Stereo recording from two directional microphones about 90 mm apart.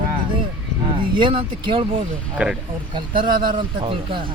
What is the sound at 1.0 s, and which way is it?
Speech, 65° right (ahead or behind).